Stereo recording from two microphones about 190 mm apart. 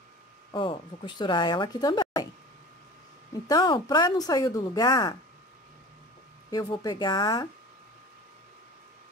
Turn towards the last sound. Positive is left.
turn(degrees=20)  # may be behind; listen again after turning